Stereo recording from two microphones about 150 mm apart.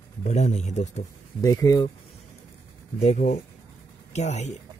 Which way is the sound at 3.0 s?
50° left (ahead or behind).